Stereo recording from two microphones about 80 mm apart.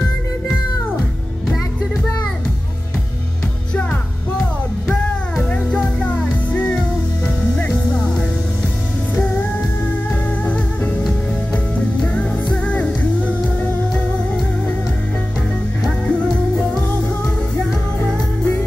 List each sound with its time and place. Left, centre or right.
4.8 s music: centre
16.1 s music: centre
18.0 s music: centre